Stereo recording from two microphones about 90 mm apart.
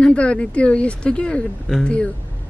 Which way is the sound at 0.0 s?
10° left (ahead or behind).